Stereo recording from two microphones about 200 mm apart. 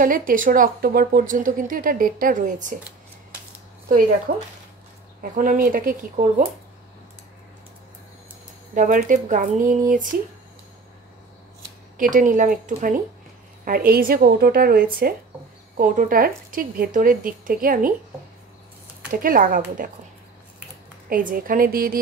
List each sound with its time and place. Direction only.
0.0 s a woman's voice: 45° right (ahead or behind)
4.3 s a woman's voice: 45° right (ahead or behind)
8.7 s speech: 40° right (ahead or behind)
12.0 s a woman's voice: 40° right (ahead or behind)
19.0 s a woman's voice: 45° right (ahead or behind)
21.1 s a woman's voice: 45° right (ahead or behind)